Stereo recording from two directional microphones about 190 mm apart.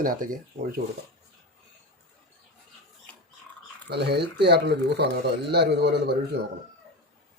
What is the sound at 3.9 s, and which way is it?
Speech, 60° right (ahead or behind).